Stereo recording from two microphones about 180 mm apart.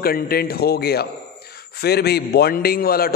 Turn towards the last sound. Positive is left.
turn(degrees=55)  # may be behind; listen again after turning